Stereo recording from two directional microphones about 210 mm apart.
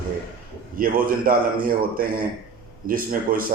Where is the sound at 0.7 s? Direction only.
45° right (ahead or behind).